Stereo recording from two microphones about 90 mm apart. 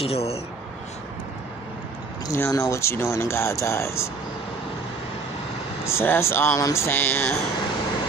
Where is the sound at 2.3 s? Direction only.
35° left (ahead or behind).